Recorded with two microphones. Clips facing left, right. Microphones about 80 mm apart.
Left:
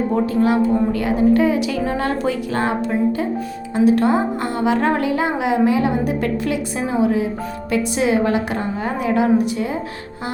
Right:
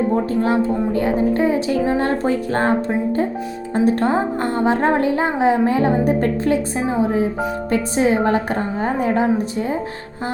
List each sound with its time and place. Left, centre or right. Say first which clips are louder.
0.4 s a woman's voice: left 2 dB; right